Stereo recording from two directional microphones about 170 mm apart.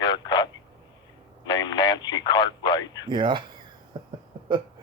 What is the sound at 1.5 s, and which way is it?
Radio, 25° left (ahead or behind).